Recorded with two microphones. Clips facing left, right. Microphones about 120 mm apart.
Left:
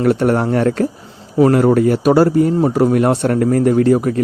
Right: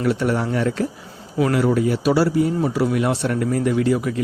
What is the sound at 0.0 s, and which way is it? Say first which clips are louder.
Speech: left 6 dB; 50° left (ahead or behind).